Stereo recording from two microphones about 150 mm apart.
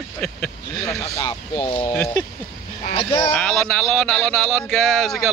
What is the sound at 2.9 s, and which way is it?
Speech, 35° left (ahead or behind).